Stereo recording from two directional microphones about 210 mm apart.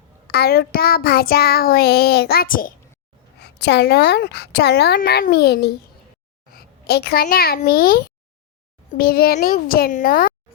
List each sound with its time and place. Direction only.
0.3 s child singing: 50° left (ahead or behind)
3.4 s child singing: 55° left (ahead or behind)
6.5 s a child's voice: 45° left (ahead or behind)
8.9 s child singing: 45° left (ahead or behind)